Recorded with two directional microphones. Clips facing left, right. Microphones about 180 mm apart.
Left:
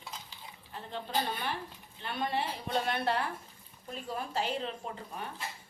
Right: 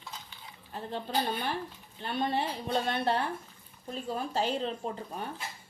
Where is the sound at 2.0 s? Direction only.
30° right (ahead or behind).